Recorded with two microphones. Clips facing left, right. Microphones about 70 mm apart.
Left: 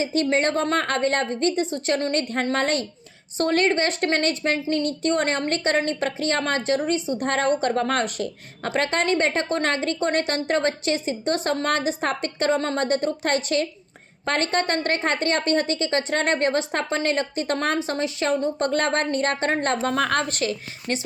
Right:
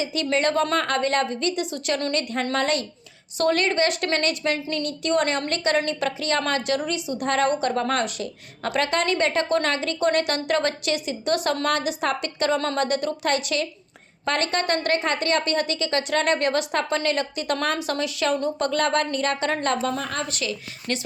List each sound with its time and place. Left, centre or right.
0.0 s a woman's voice: left
20.0 s a woman's voice: left
20.2 s a woman's voice: left
20.9 s speech: left